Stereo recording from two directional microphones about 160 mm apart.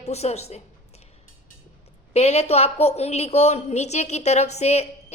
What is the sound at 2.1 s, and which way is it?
Speech, 40° left (ahead or behind).